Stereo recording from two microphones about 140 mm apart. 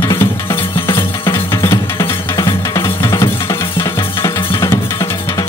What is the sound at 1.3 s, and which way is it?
Music, 20° left (ahead or behind).